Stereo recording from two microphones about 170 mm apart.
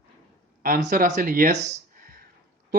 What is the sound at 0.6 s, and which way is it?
Speech, 55° right (ahead or behind).